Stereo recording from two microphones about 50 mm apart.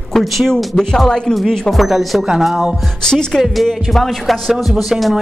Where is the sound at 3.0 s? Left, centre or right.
Centre.